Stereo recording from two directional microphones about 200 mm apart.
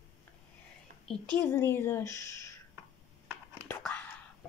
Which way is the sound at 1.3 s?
10° left (ahead or behind).